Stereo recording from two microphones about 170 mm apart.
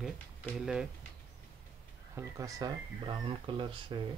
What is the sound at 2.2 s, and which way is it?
Speech, 20° right (ahead or behind).